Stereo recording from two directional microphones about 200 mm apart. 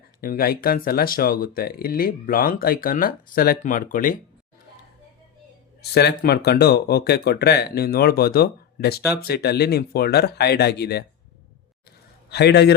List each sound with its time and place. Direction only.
0.2 s speech: 45° left (ahead or behind)
5.8 s speech: 55° left (ahead or behind)
12.3 s a man's voice: 55° left (ahead or behind)